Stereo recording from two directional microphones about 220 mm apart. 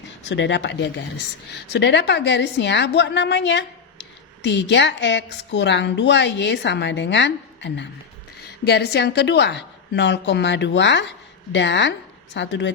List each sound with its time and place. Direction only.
0.3 s a woman's voice: 55° left (ahead or behind)